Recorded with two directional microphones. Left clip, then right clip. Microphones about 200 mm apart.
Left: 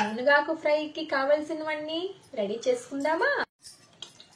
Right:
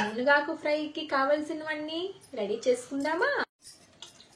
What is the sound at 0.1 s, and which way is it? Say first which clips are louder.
A woman's voice: left 1 dB; 5° right (ahead or behind).